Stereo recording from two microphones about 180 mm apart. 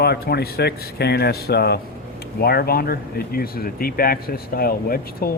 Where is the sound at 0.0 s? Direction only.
65° left (ahead or behind).